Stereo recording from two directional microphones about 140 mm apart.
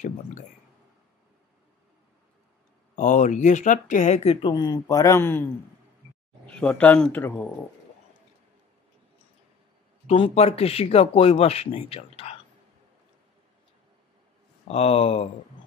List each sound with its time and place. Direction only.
3.0 s speech: 60° left (ahead or behind)
4.5 s a man's voice: 30° left (ahead or behind); by 7.5 s 10° left (ahead or behind)
10.0 s speech: 45° left (ahead or behind)
14.7 s speech: 45° left (ahead or behind)